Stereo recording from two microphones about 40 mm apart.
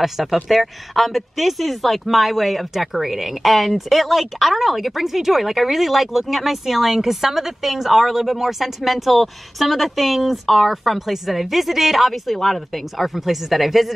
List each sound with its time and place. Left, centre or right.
0.0 s speech: centre